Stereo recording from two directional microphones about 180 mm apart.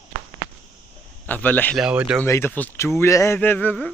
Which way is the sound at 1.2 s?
10° left (ahead or behind).